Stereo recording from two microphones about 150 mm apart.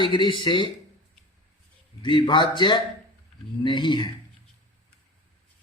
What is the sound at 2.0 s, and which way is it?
Speech, 30° left (ahead or behind).